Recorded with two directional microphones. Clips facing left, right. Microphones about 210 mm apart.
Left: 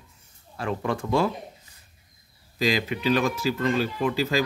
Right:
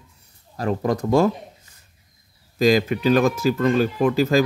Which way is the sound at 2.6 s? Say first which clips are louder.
Right 8 dB; 45° right (ahead or behind).